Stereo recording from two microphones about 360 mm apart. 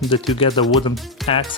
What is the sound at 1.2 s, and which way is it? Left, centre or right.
Music, centre.